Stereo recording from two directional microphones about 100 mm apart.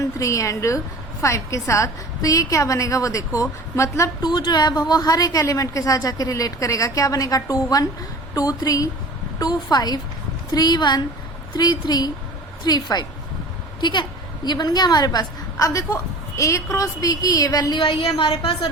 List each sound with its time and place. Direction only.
0.0 s a woman's voice: 35° left (ahead or behind)
4.2 s a woman's voice: 45° left (ahead or behind)
17.7 s a woman's voice: 60° left (ahead or behind)